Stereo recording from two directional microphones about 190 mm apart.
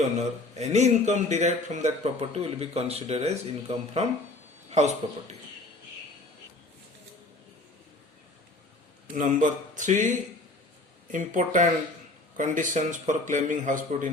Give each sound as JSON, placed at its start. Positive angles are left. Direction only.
{"t": 0.2, "sound": "speech", "side_deg": -35}
{"t": 9.1, "sound": "speech", "side_deg": -40}